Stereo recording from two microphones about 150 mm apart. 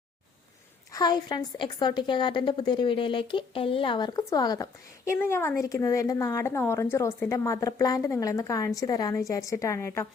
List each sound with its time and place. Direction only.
0.9 s a woman's voice: 25° left (ahead or behind)